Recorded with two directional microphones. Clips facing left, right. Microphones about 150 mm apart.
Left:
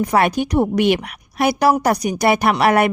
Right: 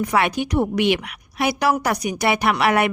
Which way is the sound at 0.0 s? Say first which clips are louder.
Left 4 dB; 40° left (ahead or behind).